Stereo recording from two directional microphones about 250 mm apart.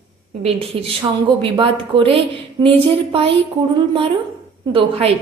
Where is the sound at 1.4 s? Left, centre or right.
Centre.